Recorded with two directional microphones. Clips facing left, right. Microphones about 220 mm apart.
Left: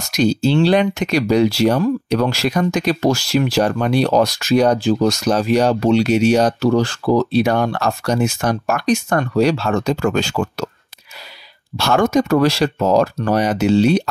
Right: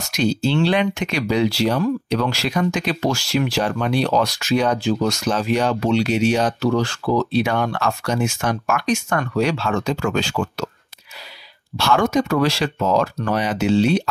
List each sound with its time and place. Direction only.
0.1 s speech: 40° left (ahead or behind)
11.8 s speech: 45° left (ahead or behind)